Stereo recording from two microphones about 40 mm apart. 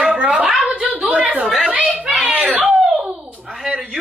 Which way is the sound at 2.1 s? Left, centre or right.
Right.